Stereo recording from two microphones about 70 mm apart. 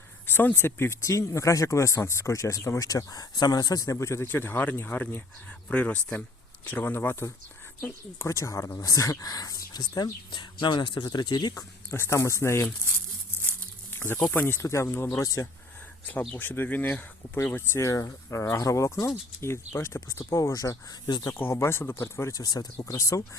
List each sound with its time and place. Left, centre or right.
0.3 s speech: left
3.9 s speech: left
8.2 s speech: left
11.9 s speech: left
13.4 s snake: left
14.3 s speech: left
16.3 s speech: left
17.7 s speech: left
21.3 s speech: left
22.8 s speech: left